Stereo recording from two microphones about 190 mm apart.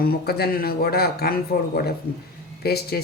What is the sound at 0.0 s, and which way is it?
A man's voice, 55° left (ahead or behind).